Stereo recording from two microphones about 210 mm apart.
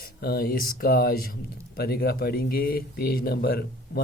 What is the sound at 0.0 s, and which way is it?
Speech, 50° left (ahead or behind).